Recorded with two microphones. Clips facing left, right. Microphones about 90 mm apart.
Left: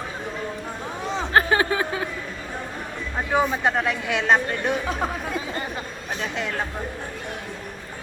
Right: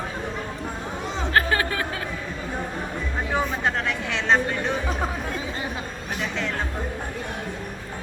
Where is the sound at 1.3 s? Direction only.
25° left (ahead or behind).